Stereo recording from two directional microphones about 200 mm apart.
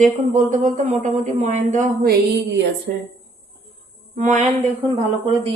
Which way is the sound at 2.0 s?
55° right (ahead or behind).